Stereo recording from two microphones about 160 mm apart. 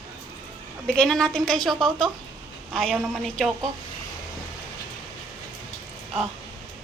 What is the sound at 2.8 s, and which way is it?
Speech, centre (ahead or behind).